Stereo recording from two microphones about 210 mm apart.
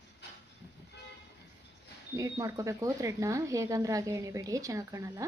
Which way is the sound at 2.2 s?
15° right (ahead or behind).